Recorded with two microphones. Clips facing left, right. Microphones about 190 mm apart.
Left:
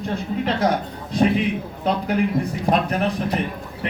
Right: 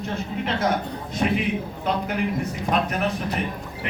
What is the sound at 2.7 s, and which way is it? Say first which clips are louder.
Speech: left 4 dB; 35° left (ahead or behind).